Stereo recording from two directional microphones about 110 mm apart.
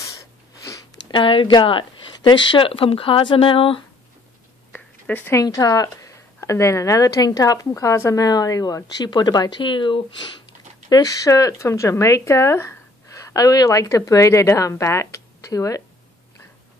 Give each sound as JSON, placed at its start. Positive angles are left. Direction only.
{"t": 1.1, "sound": "speech", "side_deg": 50}
{"t": 4.7, "sound": "a sound", "side_deg": 15}
{"t": 5.3, "sound": "a woman's voice", "side_deg": 30}
{"t": 10.9, "sound": "speech", "side_deg": 35}